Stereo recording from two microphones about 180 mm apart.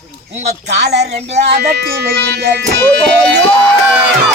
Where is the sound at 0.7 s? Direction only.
70° right (ahead or behind).